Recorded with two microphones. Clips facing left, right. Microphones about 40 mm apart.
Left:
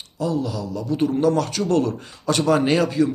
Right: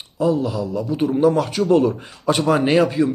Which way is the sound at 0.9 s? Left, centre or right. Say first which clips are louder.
Right 2 dB; centre.